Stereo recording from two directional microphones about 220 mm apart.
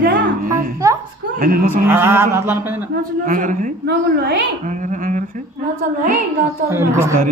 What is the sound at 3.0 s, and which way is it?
A woman's voice, 40° right (ahead or behind).